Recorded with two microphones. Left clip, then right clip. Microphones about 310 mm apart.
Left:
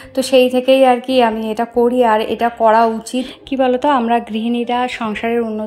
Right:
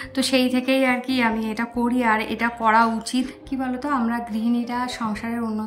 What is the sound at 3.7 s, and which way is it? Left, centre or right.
Speech, left.